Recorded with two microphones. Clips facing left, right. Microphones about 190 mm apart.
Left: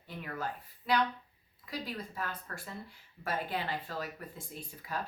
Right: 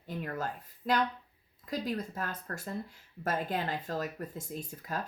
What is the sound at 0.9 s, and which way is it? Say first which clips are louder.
Speech: right 1 dB; 45° right (ahead or behind).